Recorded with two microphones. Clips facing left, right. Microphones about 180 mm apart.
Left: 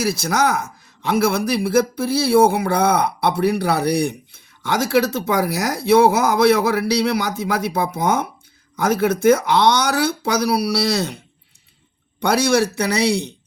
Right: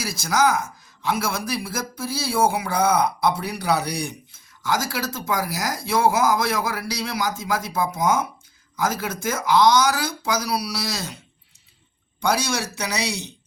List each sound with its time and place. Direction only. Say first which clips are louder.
0.0 s speech: left 2 dB; 60° left (ahead or behind)
12.2 s speech: left 7 dB; 60° left (ahead or behind)